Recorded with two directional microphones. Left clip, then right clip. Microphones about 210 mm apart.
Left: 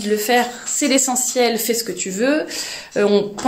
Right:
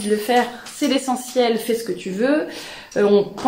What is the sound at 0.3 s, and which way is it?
Speech, 40° left (ahead or behind).